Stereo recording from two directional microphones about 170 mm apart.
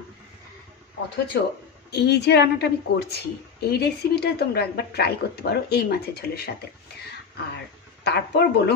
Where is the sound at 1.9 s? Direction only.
75° left (ahead or behind).